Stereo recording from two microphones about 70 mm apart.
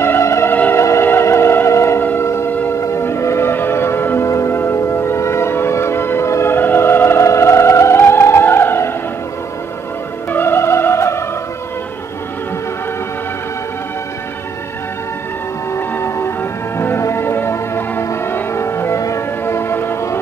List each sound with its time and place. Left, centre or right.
0.0 s music: left
2.0 s singing bowl: left
2.7 s music: left
4.3 s church bell: left
4.6 s music: left
10.3 s music: left
15.7 s music: left
19.4 s train: left